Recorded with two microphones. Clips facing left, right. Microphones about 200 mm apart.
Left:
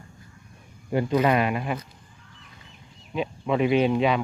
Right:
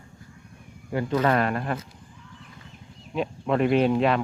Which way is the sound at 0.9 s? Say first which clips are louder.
Left 1 dB; 15° left (ahead or behind).